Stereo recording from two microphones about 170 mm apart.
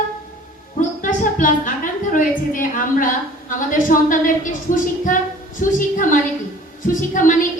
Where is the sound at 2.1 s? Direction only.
50° left (ahead or behind).